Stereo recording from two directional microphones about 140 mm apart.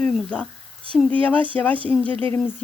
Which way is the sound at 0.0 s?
5° left (ahead or behind).